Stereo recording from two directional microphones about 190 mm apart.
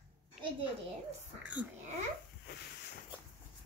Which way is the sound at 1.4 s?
5° right (ahead or behind).